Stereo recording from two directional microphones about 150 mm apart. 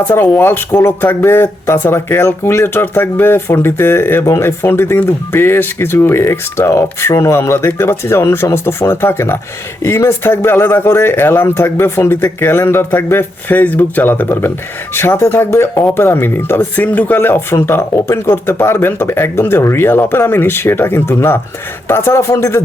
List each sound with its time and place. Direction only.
0.1 s speech: 15° left (ahead or behind)